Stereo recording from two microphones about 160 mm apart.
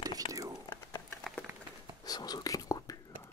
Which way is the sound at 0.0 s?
20° right (ahead or behind).